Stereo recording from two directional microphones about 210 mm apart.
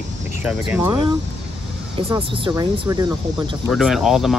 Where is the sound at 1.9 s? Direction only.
25° right (ahead or behind).